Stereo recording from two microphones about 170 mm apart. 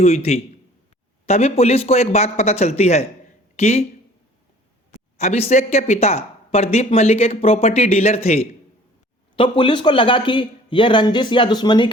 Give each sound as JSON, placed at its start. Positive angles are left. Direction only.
{"t": 0.0, "sound": "speech", "side_deg": 40}
{"t": 5.1, "sound": "a man's voice", "side_deg": 40}